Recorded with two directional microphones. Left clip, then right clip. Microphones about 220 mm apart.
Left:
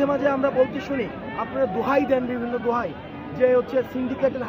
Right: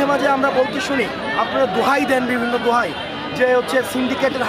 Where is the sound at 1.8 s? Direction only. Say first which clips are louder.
Right 4 dB; 20° right (ahead or behind).